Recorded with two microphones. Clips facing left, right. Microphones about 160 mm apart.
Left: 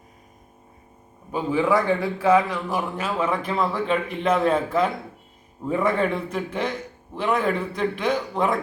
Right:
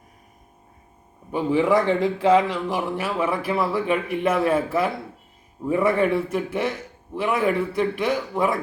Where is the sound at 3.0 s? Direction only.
10° right (ahead or behind).